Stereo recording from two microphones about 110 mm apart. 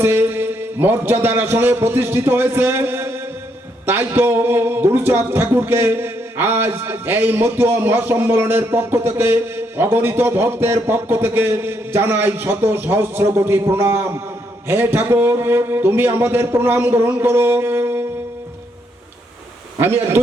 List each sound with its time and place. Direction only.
0.0 s speech: 20° right (ahead or behind)
19.8 s speech: 20° right (ahead or behind)